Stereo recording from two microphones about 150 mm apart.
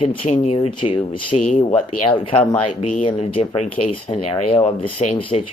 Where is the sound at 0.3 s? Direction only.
50° left (ahead or behind).